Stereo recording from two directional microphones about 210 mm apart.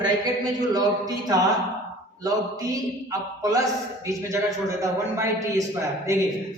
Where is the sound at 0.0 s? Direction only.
20° right (ahead or behind).